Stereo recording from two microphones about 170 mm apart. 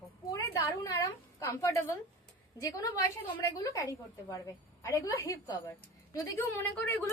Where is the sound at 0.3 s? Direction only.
20° left (ahead or behind).